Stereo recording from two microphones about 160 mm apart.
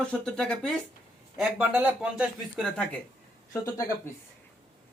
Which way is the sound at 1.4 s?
5° right (ahead or behind).